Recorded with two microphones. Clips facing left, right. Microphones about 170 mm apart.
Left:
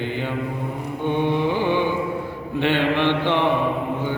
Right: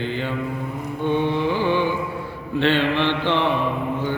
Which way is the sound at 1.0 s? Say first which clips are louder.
Even; 15° left (ahead or behind).